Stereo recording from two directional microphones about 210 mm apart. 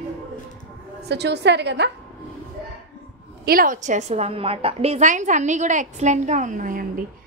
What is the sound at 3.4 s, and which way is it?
A woman's voice, 40° right (ahead or behind).